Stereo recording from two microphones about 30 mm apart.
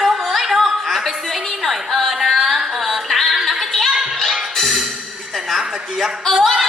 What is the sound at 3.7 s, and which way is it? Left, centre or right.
Music, centre.